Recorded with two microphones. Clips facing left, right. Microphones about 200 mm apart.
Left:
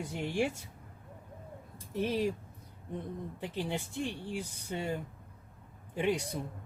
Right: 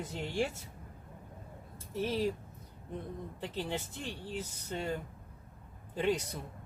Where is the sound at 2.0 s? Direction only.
15° left (ahead or behind).